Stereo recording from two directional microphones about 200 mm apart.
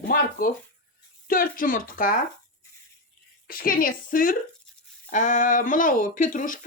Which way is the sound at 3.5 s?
45° left (ahead or behind).